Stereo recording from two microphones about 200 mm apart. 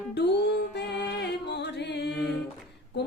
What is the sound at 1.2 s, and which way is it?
Music, 55° left (ahead or behind).